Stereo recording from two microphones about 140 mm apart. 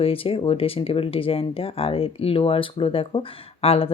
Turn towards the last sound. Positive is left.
turn(degrees=45)  # may be behind; listen again after turning